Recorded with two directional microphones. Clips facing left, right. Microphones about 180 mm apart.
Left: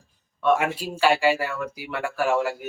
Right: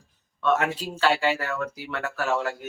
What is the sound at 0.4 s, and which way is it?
Speech, 10° left (ahead or behind).